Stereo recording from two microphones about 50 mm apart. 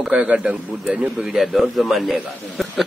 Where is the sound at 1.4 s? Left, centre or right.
Centre.